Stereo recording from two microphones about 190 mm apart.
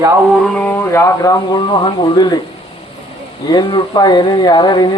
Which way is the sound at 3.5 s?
20° left (ahead or behind).